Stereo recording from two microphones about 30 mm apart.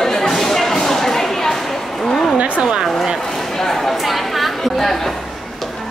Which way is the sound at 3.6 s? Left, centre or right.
Centre.